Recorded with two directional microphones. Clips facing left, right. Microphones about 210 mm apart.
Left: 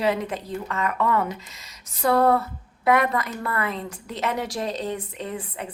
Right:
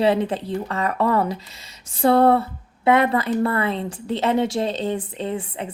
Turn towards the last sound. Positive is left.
turn(degrees=-25)  # may be behind; listen again after turning